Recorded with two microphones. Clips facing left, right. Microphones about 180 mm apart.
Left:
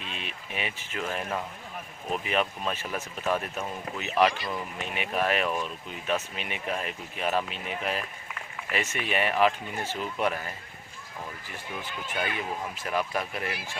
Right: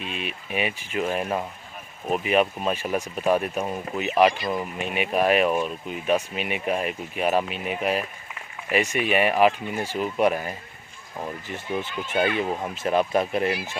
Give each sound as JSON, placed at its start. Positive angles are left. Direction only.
{"t": 0.0, "sound": "speech", "side_deg": -15}